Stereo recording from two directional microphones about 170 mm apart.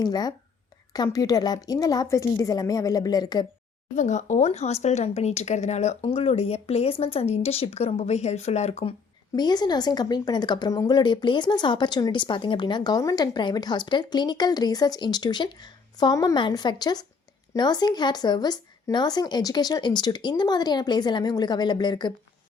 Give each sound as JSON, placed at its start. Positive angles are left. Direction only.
{"t": 0.0, "sound": "a woman's voice", "side_deg": 25}
{"t": 3.9, "sound": "speech", "side_deg": 45}
{"t": 9.3, "sound": "a woman's voice", "side_deg": 25}